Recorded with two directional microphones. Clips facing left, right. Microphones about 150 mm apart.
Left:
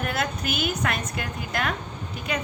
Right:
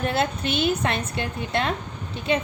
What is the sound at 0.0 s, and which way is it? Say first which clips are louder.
A woman's voice: right 4 dB; 30° right (ahead or behind).